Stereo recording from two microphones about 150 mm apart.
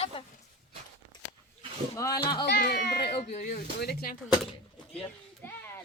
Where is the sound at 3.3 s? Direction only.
55° left (ahead or behind).